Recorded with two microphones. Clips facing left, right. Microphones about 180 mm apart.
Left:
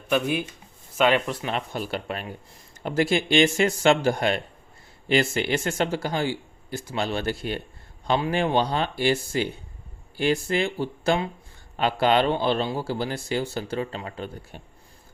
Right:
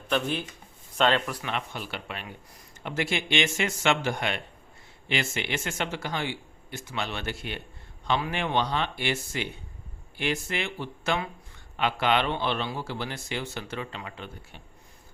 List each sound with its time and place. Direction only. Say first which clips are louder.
0.1 s speech: left 4 dB; 10° left (ahead or behind)
1.3 s a man's voice: left 4 dB; 30° left (ahead or behind)